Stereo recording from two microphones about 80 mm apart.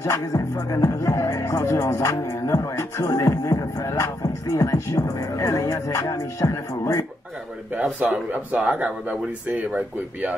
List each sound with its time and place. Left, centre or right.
0.0 s speech: left
7.7 s speech: centre